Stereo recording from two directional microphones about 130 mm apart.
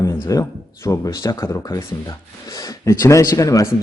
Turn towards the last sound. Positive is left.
turn(degrees=25)  # may be behind; listen again after turning